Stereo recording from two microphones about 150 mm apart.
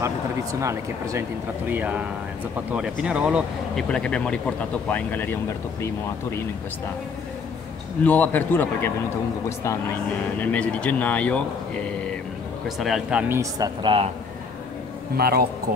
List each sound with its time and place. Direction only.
0.0 s speech: 20° right (ahead or behind)
3.7 s speech: 5° left (ahead or behind)
8.0 s speech: 10° left (ahead or behind)
10.4 s speech: 10° left (ahead or behind)
12.6 s speech: centre (ahead or behind)
13.4 s speech: 25° right (ahead or behind)
15.1 s speech: 90° right